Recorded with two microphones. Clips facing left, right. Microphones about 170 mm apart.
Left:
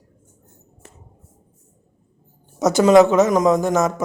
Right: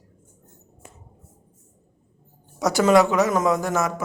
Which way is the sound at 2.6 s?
20° left (ahead or behind).